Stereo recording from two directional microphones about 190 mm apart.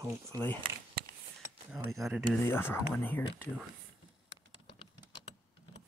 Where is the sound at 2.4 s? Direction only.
10° left (ahead or behind).